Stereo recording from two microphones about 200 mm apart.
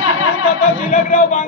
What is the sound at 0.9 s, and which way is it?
Speech, 35° left (ahead or behind).